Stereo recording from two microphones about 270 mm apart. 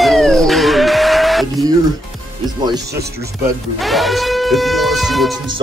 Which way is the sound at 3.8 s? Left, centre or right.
Centre.